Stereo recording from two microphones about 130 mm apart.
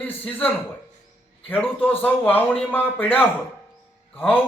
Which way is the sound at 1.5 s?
15° left (ahead or behind).